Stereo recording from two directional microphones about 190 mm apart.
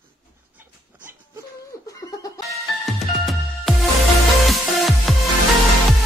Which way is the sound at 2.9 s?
Centre (ahead or behind).